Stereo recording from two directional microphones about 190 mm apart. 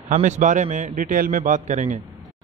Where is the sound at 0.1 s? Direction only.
40° right (ahead or behind).